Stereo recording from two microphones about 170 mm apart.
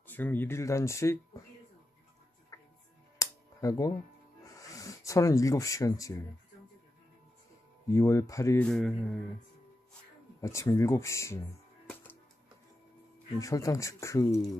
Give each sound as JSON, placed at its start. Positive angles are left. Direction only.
{"t": 0.0, "sound": "speech", "side_deg": 10}
{"t": 2.5, "sound": "music", "side_deg": 20}
{"t": 4.5, "sound": "speech", "side_deg": 20}
{"t": 7.9, "sound": "speech", "side_deg": 15}
{"t": 8.6, "sound": "speech", "side_deg": 5}
{"t": 10.4, "sound": "speech", "side_deg": 20}
{"t": 13.4, "sound": "speech", "side_deg": 20}